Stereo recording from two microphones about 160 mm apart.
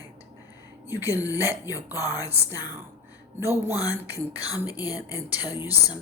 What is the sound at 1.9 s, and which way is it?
Speech, 20° left (ahead or behind).